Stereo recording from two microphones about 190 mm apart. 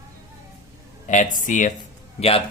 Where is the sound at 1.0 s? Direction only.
40° left (ahead or behind).